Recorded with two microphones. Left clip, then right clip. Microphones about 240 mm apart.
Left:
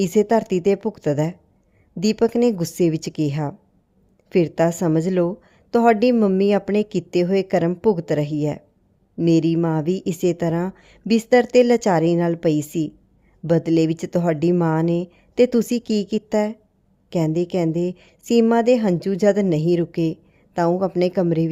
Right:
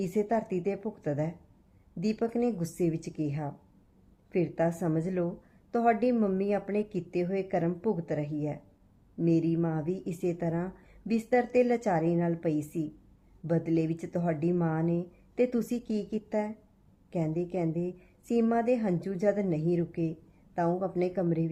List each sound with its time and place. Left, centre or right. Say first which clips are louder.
0.0 s a woman's voice: left 12 dB; left